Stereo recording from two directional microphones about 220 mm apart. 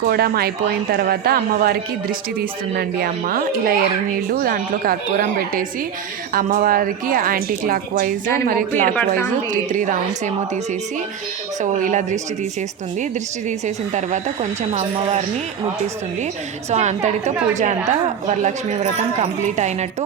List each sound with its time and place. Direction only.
0.1 s speech: 45° right (ahead or behind)
9.0 s a woman's voice: 10° left (ahead or behind)
9.5 s speech: 35° right (ahead or behind)
11.6 s speech: 35° right (ahead or behind)
13.5 s speech: 35° right (ahead or behind)
16.6 s speech: 30° right (ahead or behind)